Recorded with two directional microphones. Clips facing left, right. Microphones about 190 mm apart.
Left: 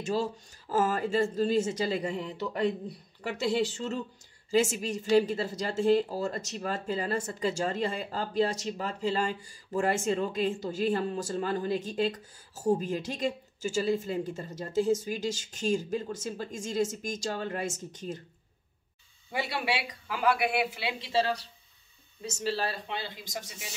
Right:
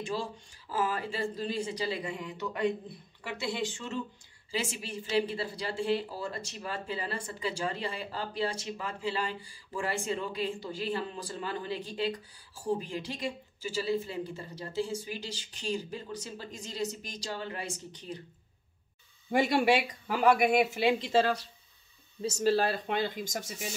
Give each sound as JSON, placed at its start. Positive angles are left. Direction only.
{"t": 0.0, "sound": "speech", "side_deg": 45}
{"t": 19.3, "sound": "speech", "side_deg": -45}
{"t": 22.4, "sound": "speech", "side_deg": -50}